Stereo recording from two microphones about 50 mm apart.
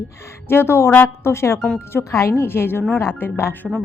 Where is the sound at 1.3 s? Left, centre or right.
Left.